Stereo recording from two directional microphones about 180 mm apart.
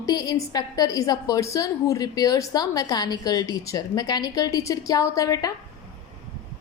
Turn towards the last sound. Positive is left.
turn(degrees=20)  # may be behind; listen again after turning